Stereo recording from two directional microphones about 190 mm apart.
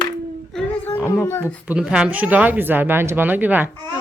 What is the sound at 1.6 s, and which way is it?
Speech, 5° right (ahead or behind).